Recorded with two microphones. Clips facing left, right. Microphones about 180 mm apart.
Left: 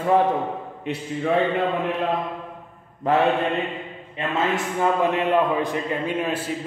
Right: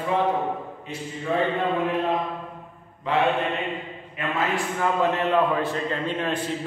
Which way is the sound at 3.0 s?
45° left (ahead or behind).